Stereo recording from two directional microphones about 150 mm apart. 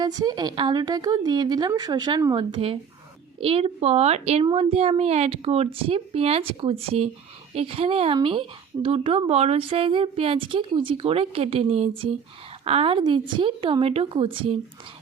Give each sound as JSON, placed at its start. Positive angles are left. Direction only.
{"t": 0.0, "sound": "a woman's voice", "side_deg": -25}